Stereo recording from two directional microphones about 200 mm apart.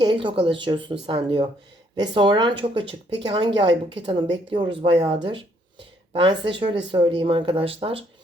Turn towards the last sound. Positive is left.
turn(degrees=-30)  # may be behind; listen again after turning